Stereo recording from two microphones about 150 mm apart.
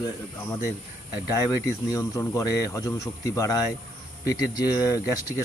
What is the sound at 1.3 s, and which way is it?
Speech, 20° left (ahead or behind).